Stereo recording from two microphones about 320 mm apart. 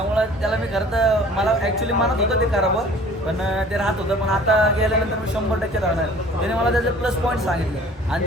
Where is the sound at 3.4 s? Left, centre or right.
Centre.